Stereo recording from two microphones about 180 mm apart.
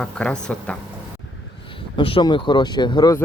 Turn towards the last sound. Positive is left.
turn(degrees=20)  # may be behind; listen again after turning